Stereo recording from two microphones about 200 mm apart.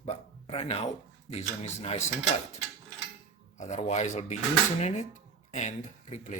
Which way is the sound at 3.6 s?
35° left (ahead or behind).